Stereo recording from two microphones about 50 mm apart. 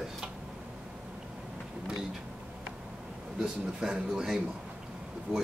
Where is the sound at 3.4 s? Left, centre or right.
Centre.